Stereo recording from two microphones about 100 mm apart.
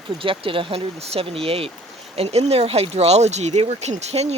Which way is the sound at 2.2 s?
90° right.